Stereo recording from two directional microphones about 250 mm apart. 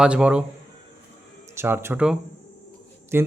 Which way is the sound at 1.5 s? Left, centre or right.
Centre.